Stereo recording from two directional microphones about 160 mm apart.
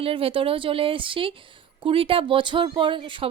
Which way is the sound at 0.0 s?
35° right (ahead or behind).